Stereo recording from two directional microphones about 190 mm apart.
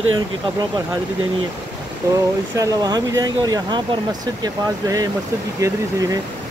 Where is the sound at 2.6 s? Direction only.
20° right (ahead or behind).